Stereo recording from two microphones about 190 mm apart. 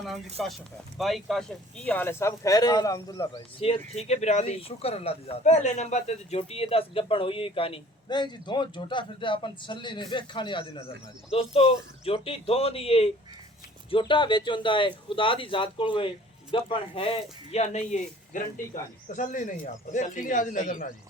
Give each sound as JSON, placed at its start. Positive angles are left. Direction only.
{"t": 0.4, "sound": "speech", "side_deg": 0}